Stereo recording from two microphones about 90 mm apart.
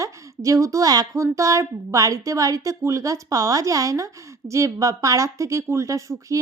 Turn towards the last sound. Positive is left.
turn(degrees=-35)  # may be behind; listen again after turning